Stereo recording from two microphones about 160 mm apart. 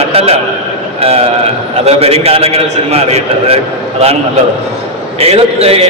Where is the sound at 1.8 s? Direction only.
40° right (ahead or behind).